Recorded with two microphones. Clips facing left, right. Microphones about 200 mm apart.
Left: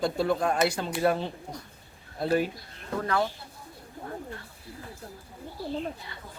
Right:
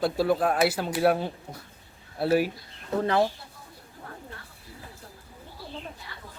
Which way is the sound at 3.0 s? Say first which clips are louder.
Right 4 dB; 25° right (ahead or behind).